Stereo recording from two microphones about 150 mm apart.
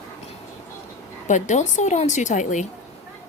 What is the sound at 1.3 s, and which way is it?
A woman's voice, 55° left (ahead or behind).